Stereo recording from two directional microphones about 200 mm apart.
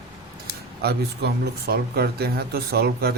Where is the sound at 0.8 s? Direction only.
55° right (ahead or behind).